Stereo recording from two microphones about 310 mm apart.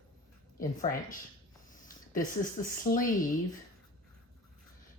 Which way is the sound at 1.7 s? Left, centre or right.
Left.